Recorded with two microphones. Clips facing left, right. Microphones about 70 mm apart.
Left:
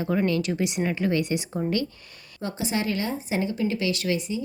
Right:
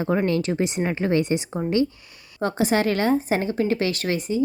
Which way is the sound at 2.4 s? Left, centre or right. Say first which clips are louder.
Right 7 dB; right.